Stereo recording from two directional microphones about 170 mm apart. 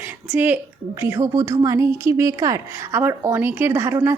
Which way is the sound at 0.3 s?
10° right (ahead or behind).